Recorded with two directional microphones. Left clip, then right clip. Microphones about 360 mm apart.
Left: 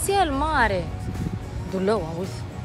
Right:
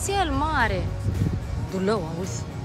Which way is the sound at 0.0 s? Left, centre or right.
Centre.